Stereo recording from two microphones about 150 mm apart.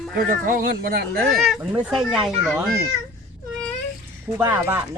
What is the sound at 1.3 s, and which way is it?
Speech, centre (ahead or behind).